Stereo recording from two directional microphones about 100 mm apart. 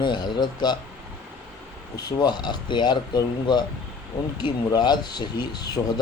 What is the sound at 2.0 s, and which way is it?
Speech, 45° left (ahead or behind).